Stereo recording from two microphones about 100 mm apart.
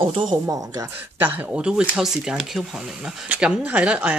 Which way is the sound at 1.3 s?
10° right (ahead or behind).